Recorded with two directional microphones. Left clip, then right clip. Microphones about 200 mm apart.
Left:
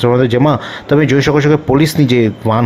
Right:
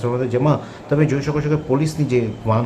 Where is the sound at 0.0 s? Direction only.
40° left (ahead or behind).